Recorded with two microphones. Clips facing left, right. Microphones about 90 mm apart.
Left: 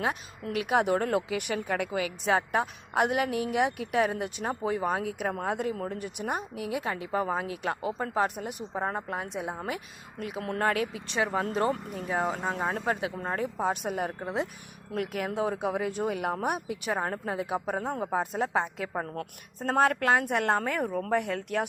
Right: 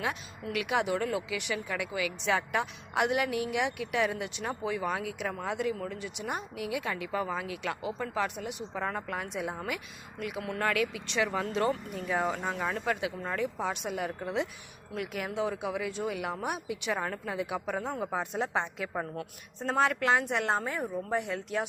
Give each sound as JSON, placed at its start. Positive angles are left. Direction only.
{"t": 0.0, "sound": "a woman's voice", "side_deg": 40}